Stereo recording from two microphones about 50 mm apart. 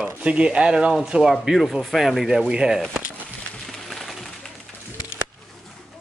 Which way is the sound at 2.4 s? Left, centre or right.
Centre.